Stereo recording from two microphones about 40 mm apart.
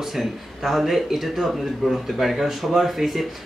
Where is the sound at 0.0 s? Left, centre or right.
Centre.